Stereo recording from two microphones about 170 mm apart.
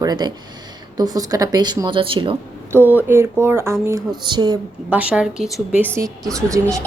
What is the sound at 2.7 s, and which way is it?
A woman's voice, 10° right (ahead or behind).